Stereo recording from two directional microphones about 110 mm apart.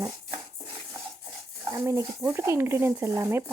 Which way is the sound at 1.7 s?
30° right (ahead or behind).